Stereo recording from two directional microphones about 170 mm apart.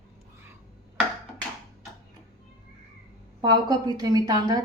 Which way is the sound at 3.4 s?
25° right (ahead or behind).